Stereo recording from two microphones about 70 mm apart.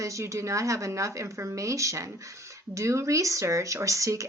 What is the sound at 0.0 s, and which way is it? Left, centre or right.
Speech, right.